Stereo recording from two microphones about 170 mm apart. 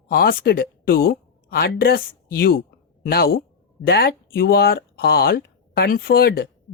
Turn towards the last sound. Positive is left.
turn(degrees=65)  # may be behind; listen again after turning